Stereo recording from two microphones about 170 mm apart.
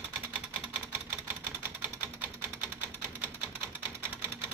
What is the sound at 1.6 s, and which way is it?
Sewing machine, 10° right (ahead or behind).